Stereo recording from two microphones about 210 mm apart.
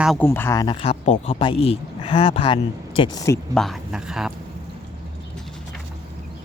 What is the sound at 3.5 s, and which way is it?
Speech, centre (ahead or behind).